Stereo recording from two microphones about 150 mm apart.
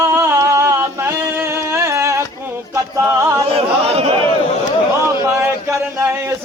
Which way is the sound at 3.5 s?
40° right (ahead or behind).